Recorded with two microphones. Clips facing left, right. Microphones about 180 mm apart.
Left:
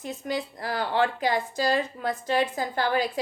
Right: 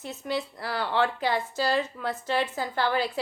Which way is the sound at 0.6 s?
45° left (ahead or behind).